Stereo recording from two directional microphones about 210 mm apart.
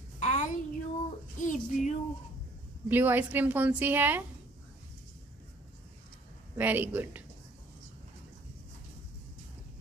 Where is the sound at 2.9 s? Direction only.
10° right (ahead or behind).